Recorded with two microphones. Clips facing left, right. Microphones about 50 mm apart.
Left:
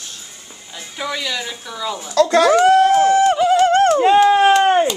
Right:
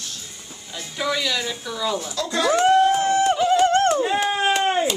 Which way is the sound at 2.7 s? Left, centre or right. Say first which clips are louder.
Left 5 dB; left.